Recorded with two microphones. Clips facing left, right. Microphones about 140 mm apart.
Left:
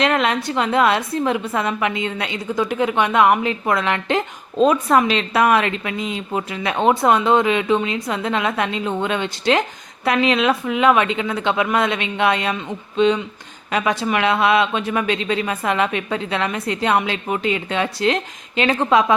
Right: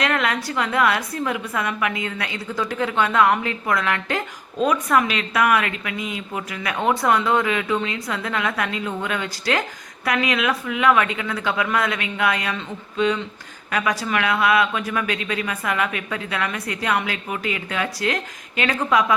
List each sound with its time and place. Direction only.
0.0 s a woman's voice: 25° left (ahead or behind)